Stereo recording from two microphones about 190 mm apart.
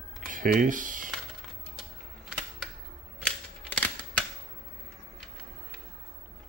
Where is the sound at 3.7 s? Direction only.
10° left (ahead or behind).